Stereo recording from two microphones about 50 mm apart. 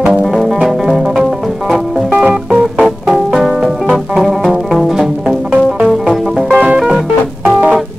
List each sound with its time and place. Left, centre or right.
0.2 s music: centre
2.8 s music: centre
6.5 s music: right